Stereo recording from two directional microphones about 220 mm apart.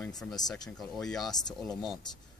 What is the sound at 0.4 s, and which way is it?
Speech, 20° left (ahead or behind).